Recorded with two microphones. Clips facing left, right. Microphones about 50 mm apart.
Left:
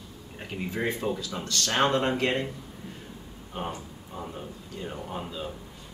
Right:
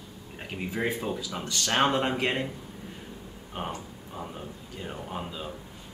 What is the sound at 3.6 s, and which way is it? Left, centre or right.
Speech, centre.